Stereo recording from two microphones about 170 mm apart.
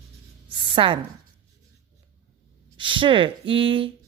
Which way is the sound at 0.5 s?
30° right (ahead or behind).